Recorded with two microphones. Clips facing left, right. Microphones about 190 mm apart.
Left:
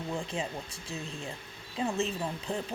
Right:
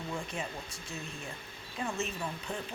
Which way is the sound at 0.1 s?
25° left (ahead or behind).